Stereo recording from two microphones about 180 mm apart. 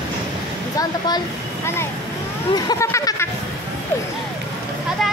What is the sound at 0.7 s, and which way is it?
Speech, 20° left (ahead or behind).